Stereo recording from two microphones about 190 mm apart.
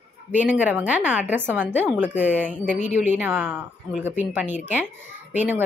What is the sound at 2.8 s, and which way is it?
Speech, 40° left (ahead or behind).